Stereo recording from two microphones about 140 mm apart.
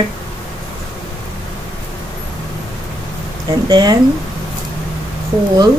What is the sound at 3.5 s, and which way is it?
Speech, 30° right (ahead or behind).